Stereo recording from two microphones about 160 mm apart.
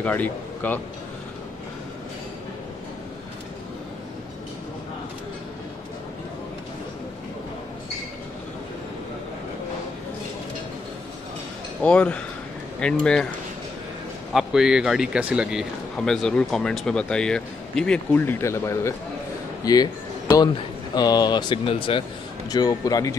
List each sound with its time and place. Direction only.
0.0 s a man's voice: 10° left (ahead or behind)
11.8 s a man's voice: 10° left (ahead or behind)
14.3 s a man's voice: 5° right (ahead or behind); by 18.9 s 15° left (ahead or behind)
19.6 s a sound: 25° left (ahead or behind)
20.9 s speech: 25° left (ahead or behind)